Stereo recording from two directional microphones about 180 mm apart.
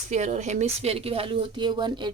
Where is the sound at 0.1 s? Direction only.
40° right (ahead or behind).